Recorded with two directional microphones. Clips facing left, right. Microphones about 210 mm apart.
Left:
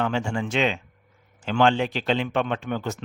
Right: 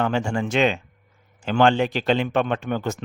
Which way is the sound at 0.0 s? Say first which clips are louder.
Right 3 dB; 45° right (ahead or behind).